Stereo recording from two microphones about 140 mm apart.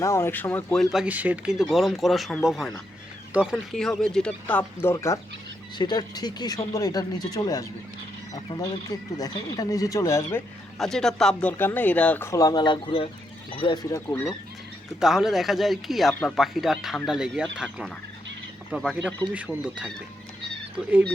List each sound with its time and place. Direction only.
0.0 s speech: 20° left (ahead or behind)
0.9 s speech: 10° right (ahead or behind); by 10.4 s 20° left (ahead or behind)
10.8 s speech: 5° left (ahead or behind); by 13.7 s 35° left (ahead or behind)
15.0 s speech: 5° right (ahead or behind)
18.8 s speech: centre (ahead or behind)
19.3 s speech: 10° right (ahead or behind)